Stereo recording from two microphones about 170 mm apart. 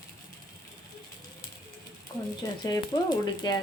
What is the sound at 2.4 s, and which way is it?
Speech, 25° left (ahead or behind).